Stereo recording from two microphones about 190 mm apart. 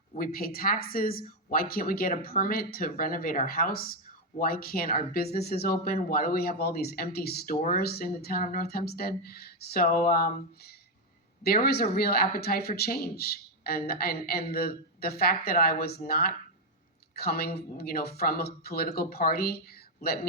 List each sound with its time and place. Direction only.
0.1 s speech: 50° left (ahead or behind)